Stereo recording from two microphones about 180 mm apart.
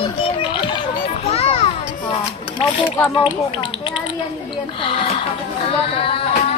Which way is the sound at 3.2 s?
30° left (ahead or behind).